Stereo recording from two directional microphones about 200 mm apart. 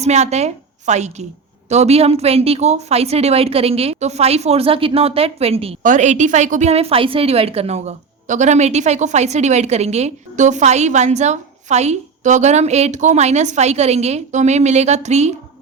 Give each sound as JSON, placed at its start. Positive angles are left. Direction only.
{"t": 0.0, "sound": "a woman's voice", "side_deg": -35}